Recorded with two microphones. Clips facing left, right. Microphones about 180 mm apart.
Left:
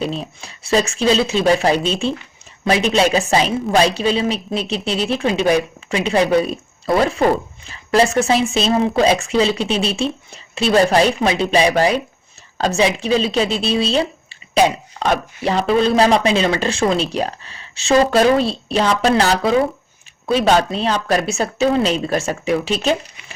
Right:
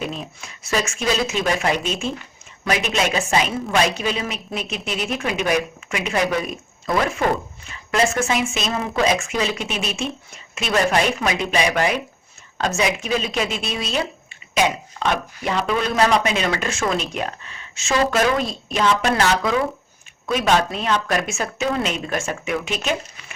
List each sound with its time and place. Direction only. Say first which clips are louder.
0.0 s speech: left 5 dB; 30° left (ahead or behind)